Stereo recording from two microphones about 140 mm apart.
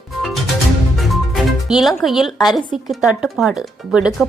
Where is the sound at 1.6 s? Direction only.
Centre (ahead or behind).